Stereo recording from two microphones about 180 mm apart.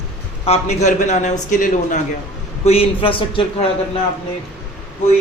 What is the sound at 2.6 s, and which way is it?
Speech, 30° left (ahead or behind).